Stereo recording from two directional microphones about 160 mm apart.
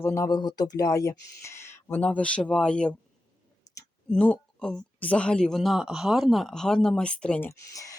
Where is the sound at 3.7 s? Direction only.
25° left (ahead or behind).